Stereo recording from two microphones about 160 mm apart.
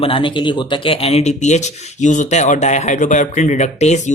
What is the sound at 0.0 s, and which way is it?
Speech, 30° left (ahead or behind).